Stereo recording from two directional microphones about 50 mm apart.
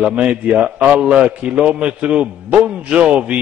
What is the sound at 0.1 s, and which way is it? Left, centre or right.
A man's voice, right.